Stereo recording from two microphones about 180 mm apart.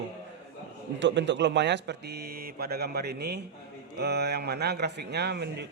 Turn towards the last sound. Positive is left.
turn(degrees=-65)  # may be behind; listen again after turning